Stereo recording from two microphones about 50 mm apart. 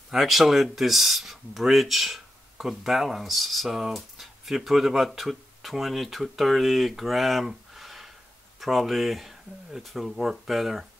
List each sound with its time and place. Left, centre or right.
0.1 s speech: centre